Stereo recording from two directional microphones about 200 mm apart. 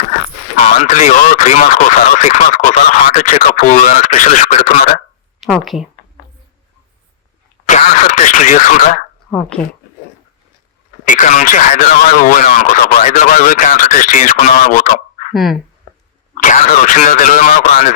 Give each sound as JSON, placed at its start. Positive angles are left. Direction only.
{"t": 0.6, "sound": "speech", "side_deg": 35}
{"t": 5.4, "sound": "speech", "side_deg": 0}
{"t": 7.7, "sound": "a sound", "side_deg": 35}
{"t": 9.3, "sound": "speech", "side_deg": 5}
{"t": 11.0, "sound": "speech", "side_deg": 40}
{"t": 15.3, "sound": "speech", "side_deg": 0}
{"t": 16.3, "sound": "speech", "side_deg": 40}